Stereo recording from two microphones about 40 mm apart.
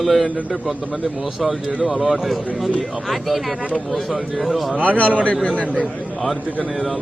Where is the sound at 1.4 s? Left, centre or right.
Centre.